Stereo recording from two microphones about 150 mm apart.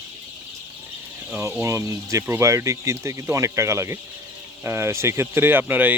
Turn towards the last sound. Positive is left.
turn(degrees=-10)  # may be behind; listen again after turning